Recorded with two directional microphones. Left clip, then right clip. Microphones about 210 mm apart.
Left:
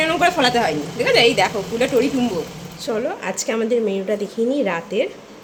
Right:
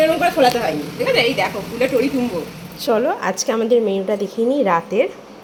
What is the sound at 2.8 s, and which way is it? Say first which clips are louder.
A woman's voice: right 6 dB; 10° right (ahead or behind).